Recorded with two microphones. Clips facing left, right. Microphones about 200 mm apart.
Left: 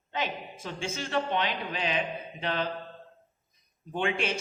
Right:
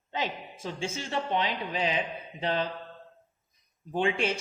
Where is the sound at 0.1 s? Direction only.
30° right (ahead or behind).